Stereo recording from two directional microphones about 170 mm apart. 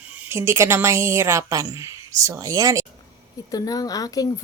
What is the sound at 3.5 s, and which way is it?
Speech, 20° left (ahead or behind).